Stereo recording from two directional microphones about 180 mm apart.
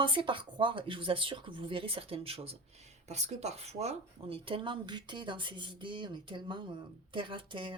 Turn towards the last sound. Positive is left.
turn(degrees=-30)  # may be behind; listen again after turning